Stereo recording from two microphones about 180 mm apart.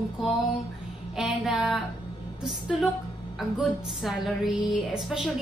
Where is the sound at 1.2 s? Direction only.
Centre (ahead or behind).